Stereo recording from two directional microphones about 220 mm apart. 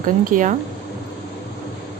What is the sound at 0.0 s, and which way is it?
Speech, 35° right (ahead or behind).